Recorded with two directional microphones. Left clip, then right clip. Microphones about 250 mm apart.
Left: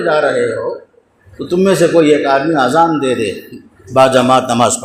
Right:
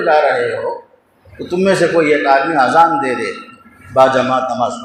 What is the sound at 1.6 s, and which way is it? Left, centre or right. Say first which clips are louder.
A man's voice: left 2 dB; left.